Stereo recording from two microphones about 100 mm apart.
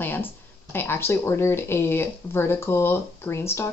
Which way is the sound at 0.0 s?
20° left (ahead or behind).